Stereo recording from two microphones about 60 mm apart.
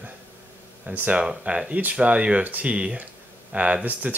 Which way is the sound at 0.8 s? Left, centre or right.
Right.